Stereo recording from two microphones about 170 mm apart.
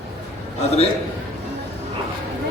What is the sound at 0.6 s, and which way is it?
Speech, 35° left (ahead or behind).